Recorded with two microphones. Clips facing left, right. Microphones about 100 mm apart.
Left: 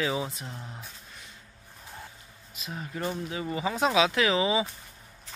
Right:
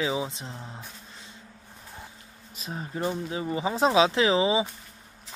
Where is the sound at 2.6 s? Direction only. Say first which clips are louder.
Right 3 dB; 30° right (ahead or behind).